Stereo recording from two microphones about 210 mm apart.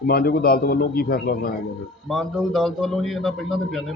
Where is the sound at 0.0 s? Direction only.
45° left (ahead or behind).